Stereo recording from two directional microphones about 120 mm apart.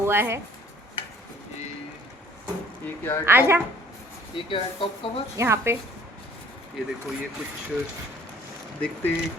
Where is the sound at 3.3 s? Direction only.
20° right (ahead or behind).